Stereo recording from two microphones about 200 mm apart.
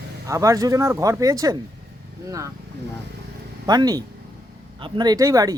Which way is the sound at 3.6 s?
20° right (ahead or behind).